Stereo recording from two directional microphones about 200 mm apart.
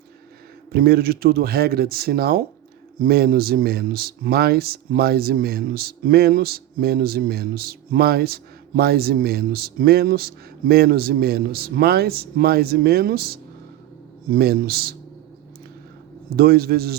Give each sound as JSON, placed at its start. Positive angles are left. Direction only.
{"t": 0.7, "sound": "speech", "side_deg": -50}
{"t": 16.3, "sound": "speech", "side_deg": -50}